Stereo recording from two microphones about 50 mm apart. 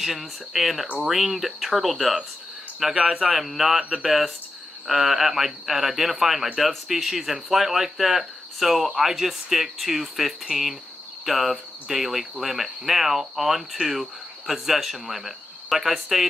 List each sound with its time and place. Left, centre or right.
0.0 s cricket: centre
2.9 s speech: centre
3.7 s speech: centre
4.8 s speech: centre
6.9 s cricket: centre